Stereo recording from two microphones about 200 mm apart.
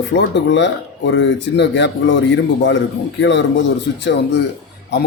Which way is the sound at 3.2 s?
65° left (ahead or behind).